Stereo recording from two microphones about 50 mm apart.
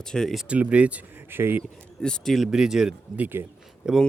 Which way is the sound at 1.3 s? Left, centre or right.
Right.